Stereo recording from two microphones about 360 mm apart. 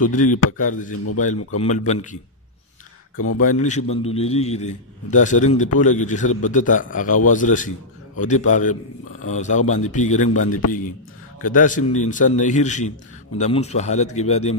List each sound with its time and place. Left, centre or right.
0.0 s a man's voice: left
0.3 s speech: left
0.6 s a man's voice: left
1.3 s speech: left
1.6 s a man's voice: centre
3.2 s speech: left
3.4 s a man's voice: centre
11.4 s a man's voice: left